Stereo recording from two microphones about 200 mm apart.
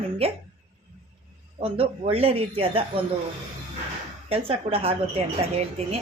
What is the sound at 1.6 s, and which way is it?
A woman's voice, 30° right (ahead or behind).